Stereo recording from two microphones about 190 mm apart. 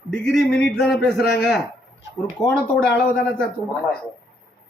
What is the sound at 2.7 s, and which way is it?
Speech, 5° left (ahead or behind).